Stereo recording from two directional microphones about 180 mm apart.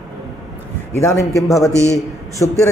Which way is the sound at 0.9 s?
15° left (ahead or behind).